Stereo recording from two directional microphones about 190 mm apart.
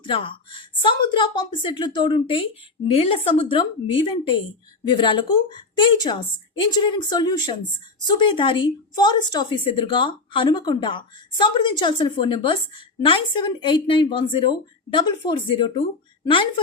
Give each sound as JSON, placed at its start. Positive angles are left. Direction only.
{"t": 0.0, "sound": "a woman's voice", "side_deg": 25}